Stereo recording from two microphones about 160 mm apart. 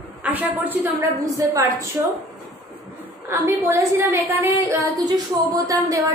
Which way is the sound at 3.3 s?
15° right (ahead or behind).